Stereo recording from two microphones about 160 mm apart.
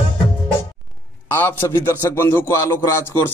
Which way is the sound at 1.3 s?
15° left (ahead or behind).